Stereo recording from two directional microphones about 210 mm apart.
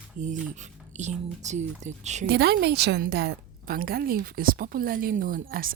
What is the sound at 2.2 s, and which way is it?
A woman's voice, 50° right (ahead or behind).